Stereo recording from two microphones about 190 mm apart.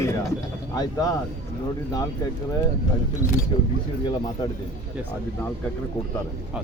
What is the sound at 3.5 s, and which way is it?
Speech, 25° left (ahead or behind).